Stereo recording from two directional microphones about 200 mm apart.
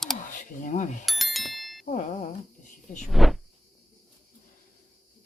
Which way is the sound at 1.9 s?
40° left (ahead or behind).